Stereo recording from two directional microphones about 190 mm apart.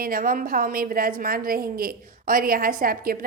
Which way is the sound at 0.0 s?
50° right (ahead or behind).